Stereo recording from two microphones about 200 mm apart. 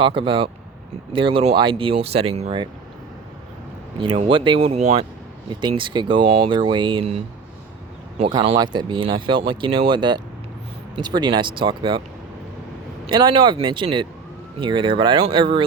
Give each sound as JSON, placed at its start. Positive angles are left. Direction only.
{"t": 0.0, "sound": "speech", "side_deg": -25}
{"t": 4.0, "sound": "speech", "side_deg": -25}
{"t": 8.2, "sound": "speech", "side_deg": -25}
{"t": 13.1, "sound": "speech", "side_deg": -20}